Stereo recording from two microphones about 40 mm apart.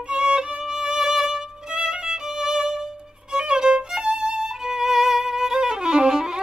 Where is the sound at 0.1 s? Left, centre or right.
Right.